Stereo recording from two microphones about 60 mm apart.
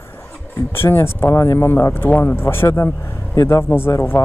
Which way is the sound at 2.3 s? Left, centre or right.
Left.